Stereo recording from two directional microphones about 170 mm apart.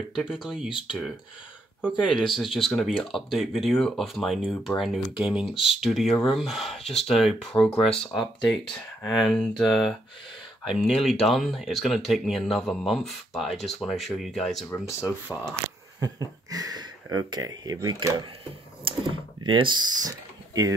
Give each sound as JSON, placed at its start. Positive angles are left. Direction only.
{"t": 0.1, "sound": "speech", "side_deg": -5}
{"t": 16.0, "sound": "speech", "side_deg": -20}